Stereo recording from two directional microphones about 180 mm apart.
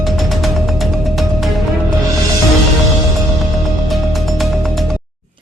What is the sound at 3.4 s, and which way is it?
Music, centre (ahead or behind).